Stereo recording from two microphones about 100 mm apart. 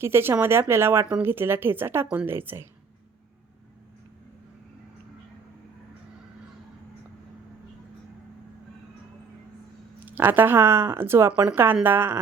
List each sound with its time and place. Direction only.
0.0 s speech: 25° right (ahead or behind)
10.1 s speech: 20° right (ahead or behind)